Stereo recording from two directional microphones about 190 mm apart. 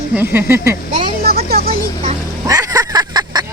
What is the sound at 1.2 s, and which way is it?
Speech, 55° right (ahead or behind).